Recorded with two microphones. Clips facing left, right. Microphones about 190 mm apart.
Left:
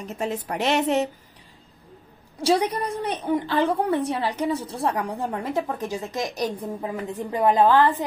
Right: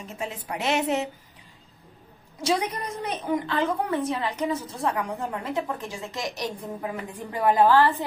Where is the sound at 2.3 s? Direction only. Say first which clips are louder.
Left 4 dB; 35° left (ahead or behind).